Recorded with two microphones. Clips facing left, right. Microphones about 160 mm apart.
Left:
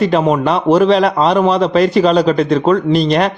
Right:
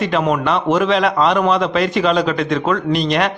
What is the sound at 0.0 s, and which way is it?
A man's voice, 35° left (ahead or behind).